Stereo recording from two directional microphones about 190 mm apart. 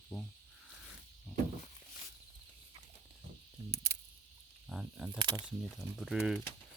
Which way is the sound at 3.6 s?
15° right (ahead or behind).